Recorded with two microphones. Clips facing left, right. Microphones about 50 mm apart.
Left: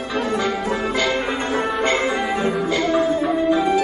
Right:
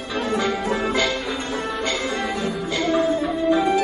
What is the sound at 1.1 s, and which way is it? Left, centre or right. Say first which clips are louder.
Music: left 4 dB; left.